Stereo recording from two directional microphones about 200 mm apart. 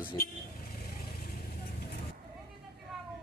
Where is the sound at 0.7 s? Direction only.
50° left (ahead or behind).